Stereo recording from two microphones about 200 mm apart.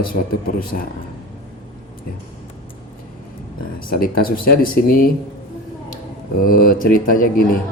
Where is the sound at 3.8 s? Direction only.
45° left (ahead or behind).